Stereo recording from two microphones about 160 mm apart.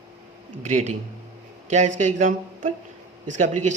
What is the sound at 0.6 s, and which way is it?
A man's voice, 45° right (ahead or behind).